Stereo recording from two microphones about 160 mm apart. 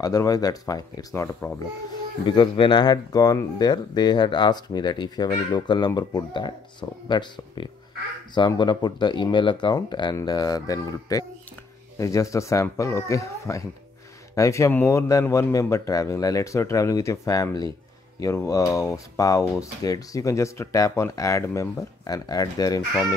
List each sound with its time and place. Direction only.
0.0 s speech: 20° left (ahead or behind)